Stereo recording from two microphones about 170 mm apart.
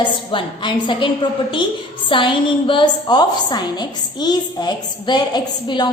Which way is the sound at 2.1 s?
30° left (ahead or behind).